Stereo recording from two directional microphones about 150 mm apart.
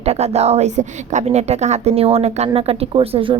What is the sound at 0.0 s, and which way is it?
A woman's voice, 45° right (ahead or behind).